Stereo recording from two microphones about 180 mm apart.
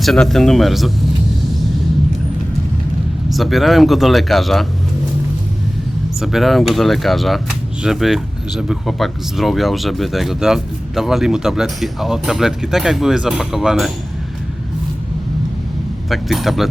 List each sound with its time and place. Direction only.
0.0 s speech: centre (ahead or behind)
3.3 s speech: centre (ahead or behind)
6.1 s speech: centre (ahead or behind)
16.0 s speech: centre (ahead or behind)